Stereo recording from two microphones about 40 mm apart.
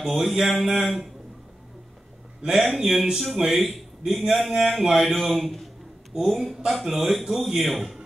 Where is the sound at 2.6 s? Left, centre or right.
Centre.